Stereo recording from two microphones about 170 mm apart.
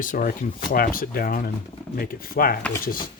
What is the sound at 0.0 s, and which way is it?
Speech, 50° left (ahead or behind).